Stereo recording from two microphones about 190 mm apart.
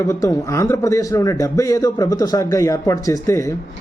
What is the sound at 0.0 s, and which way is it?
A man's voice, 15° left (ahead or behind).